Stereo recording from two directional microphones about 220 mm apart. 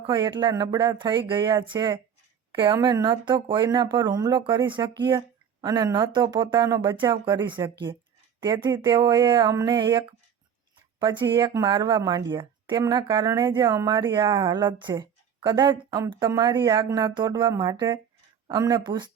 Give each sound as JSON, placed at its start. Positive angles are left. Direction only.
{"t": 0.0, "sound": "speech", "side_deg": -20}
{"t": 11.0, "sound": "speech", "side_deg": -20}